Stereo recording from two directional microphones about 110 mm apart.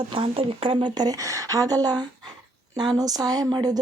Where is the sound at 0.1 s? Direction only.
55° right (ahead or behind).